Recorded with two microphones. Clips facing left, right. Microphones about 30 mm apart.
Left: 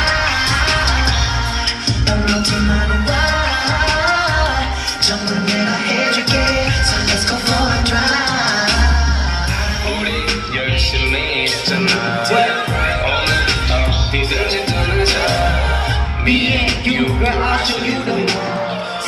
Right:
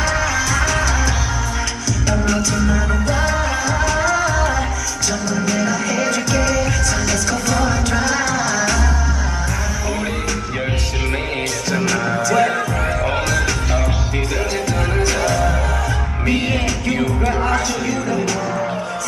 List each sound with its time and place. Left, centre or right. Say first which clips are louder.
0.0 s music: left 3 dB; left
2.0 s music: left 2 dB; left
11.7 s music: even; left
15.0 s music: left 2 dB; left